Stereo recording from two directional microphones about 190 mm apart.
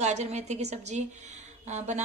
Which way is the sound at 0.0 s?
35° right (ahead or behind).